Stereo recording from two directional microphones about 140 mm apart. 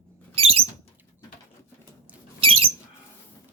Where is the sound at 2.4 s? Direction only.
40° right (ahead or behind).